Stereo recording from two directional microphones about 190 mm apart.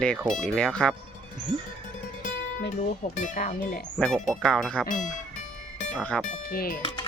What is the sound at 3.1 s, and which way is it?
Speech, 40° left (ahead or behind).